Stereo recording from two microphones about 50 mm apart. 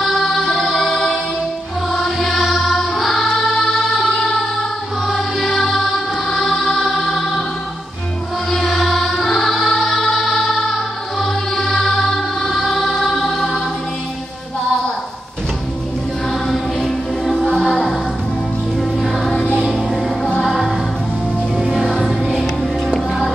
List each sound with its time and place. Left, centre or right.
0.0 s music: centre
8.5 s music: centre
13.1 s choir: centre
16.8 s music: centre
17.5 s music: centre
19.3 s music: centre
19.7 s music: centre
21.8 s music: centre